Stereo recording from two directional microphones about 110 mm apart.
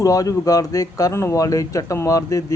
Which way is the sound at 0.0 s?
30° left (ahead or behind).